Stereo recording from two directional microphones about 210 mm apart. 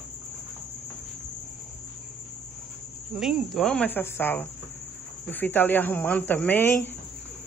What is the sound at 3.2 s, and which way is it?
Speech, centre (ahead or behind).